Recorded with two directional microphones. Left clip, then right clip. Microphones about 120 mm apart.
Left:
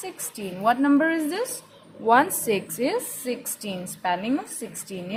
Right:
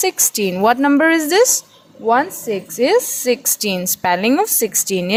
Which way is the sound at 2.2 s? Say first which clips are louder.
Right 3 dB; 25° right (ahead or behind).